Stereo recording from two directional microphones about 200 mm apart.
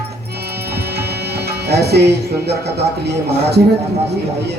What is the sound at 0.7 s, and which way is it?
Music, 55° right (ahead or behind).